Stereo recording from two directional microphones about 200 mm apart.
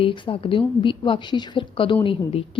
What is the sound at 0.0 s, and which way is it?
A woman's voice, 25° left (ahead or behind).